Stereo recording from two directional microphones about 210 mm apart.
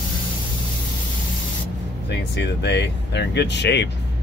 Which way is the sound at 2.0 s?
55° left (ahead or behind).